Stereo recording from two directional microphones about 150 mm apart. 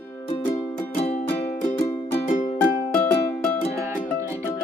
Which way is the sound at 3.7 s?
20° right (ahead or behind).